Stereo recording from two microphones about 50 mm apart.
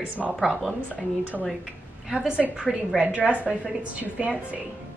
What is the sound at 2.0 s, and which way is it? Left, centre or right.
A woman's voice, centre.